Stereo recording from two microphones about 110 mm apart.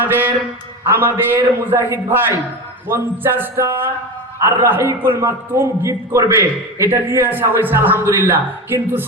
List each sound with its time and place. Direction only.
0.0 s a man's voice: 15° right (ahead or behind)